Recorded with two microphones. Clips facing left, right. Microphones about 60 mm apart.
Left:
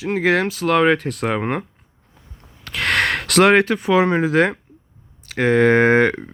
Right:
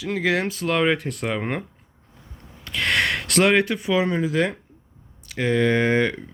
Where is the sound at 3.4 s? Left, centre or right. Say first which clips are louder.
Left 5 dB; left.